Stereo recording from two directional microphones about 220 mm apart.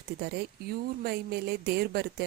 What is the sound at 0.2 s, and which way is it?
A woman's voice, 50° right (ahead or behind).